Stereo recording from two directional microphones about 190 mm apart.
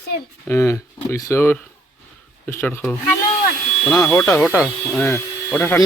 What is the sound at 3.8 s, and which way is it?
Speech, 5° left (ahead or behind).